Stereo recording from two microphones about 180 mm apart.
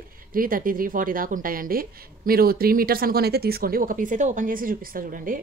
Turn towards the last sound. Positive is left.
turn(degrees=-50)  # may be behind; listen again after turning